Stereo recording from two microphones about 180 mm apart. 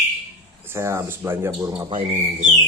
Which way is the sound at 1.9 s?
35° right (ahead or behind).